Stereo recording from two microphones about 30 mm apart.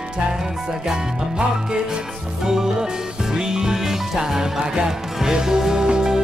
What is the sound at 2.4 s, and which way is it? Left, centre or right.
Music, centre.